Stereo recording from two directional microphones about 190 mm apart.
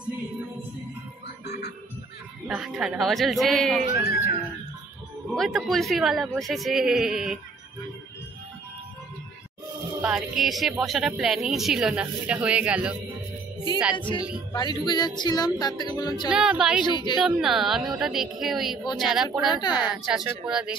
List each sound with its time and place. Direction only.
1.4 s music: 60° left (ahead or behind)
2.4 s a woman's voice: 5° right (ahead or behind)
5.3 s a woman's voice: centre (ahead or behind)
10.0 s a woman's voice: centre (ahead or behind)
13.9 s music: 25° left (ahead or behind)
16.3 s a woman's voice: 5° right (ahead or behind)
16.8 s music: 25° left (ahead or behind)
17.2 s a woman's voice: centre (ahead or behind)
19.5 s music: 20° left (ahead or behind)
19.8 s a woman's voice: 5° right (ahead or behind)